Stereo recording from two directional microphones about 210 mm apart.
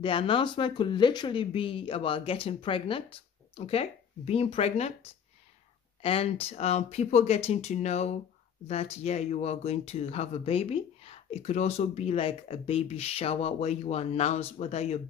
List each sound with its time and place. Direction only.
0.0 s speech: 25° left (ahead or behind)
6.0 s speech: 30° left (ahead or behind)